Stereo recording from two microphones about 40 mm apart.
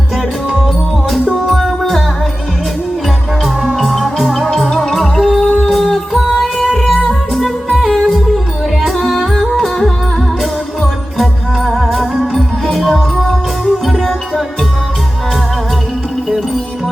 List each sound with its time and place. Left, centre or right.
1.3 s music: centre
1.8 s music: centre
3.8 s music: centre
5.5 s music: centre
5.7 s music: centre
12.3 s music: centre